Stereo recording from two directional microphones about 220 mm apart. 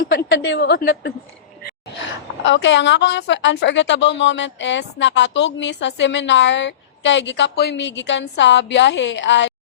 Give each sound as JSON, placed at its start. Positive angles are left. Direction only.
{"t": 0.3, "sound": "a woman's voice", "side_deg": 55}
{"t": 2.5, "sound": "a woman's voice", "side_deg": 55}